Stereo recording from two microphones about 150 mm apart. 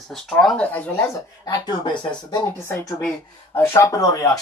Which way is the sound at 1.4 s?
30° left (ahead or behind).